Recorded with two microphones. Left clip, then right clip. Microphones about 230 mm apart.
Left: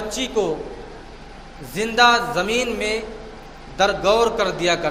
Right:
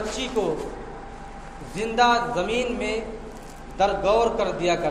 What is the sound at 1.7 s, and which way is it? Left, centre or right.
A man's voice, left.